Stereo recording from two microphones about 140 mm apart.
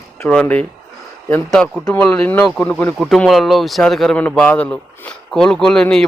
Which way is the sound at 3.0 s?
Centre (ahead or behind).